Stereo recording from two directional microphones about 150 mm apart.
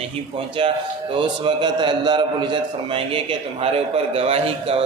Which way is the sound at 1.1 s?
30° right (ahead or behind).